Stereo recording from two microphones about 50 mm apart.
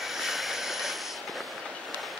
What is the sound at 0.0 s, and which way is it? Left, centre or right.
Vehicle, centre.